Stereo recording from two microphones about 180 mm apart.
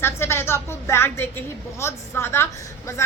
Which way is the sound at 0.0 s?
15° left (ahead or behind).